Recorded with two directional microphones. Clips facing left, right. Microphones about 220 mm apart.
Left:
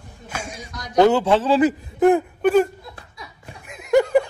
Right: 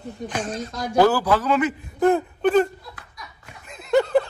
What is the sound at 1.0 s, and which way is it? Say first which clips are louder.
Speech: left 3 dB; 20° left (ahead or behind).